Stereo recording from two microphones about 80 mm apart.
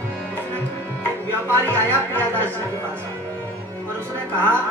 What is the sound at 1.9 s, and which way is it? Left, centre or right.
Speech, left.